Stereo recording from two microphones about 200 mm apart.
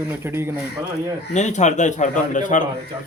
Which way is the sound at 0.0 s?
10° right (ahead or behind).